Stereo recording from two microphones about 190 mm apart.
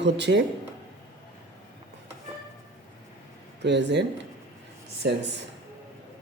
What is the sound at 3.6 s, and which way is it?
Speech, 65° right (ahead or behind).